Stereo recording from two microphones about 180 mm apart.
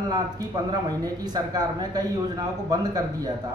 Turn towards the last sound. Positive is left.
turn(degrees=-20)  # may be behind; listen again after turning